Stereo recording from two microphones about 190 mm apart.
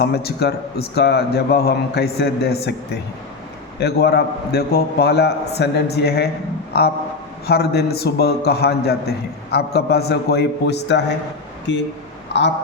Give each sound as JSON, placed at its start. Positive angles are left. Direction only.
{"t": 0.0, "sound": "a man's voice", "side_deg": 55}
{"t": 3.8, "sound": "a man's voice", "side_deg": 60}